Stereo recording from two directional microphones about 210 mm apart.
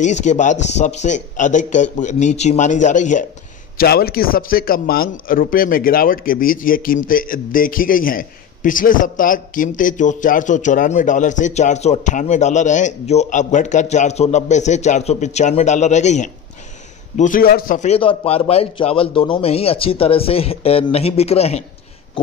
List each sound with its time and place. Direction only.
0.0 s a man's voice: 35° left (ahead or behind)
3.7 s a man's voice: 45° left (ahead or behind); by 21.6 s 30° left (ahead or behind)